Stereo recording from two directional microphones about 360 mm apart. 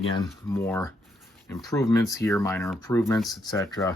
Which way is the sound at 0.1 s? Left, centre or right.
Centre.